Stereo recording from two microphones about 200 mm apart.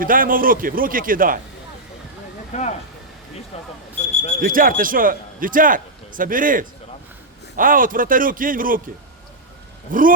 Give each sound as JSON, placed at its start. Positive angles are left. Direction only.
{"t": 0.0, "sound": "speech", "side_deg": -45}
{"t": 2.5, "sound": "speech", "side_deg": 35}
{"t": 4.0, "sound": "smoke detector", "side_deg": 35}
{"t": 4.4, "sound": "speech", "side_deg": -45}
{"t": 9.9, "sound": "speech", "side_deg": -45}